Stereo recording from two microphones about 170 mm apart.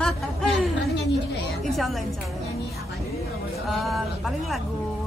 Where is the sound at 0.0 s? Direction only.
Centre (ahead or behind).